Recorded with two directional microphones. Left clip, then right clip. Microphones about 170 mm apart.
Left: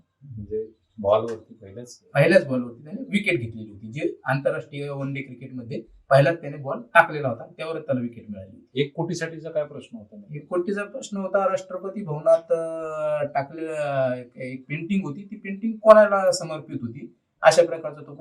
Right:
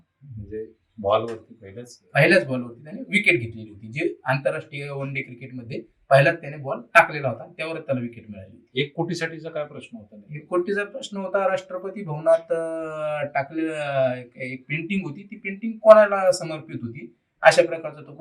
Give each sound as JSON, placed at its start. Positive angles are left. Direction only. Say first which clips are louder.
{"t": 2.1, "sound": "speech", "louder": "even", "side_deg": -15}
{"t": 8.7, "sound": "a man's voice", "louder": "even", "side_deg": 10}